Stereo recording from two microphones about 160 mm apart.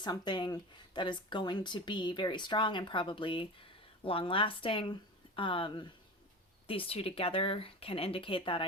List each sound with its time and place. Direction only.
0.0 s speech: 30° left (ahead or behind)